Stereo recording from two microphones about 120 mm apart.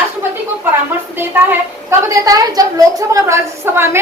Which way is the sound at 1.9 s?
30° right (ahead or behind).